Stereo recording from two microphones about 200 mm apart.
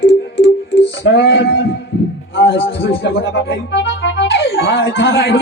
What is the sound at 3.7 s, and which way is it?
Speech, 60° left (ahead or behind).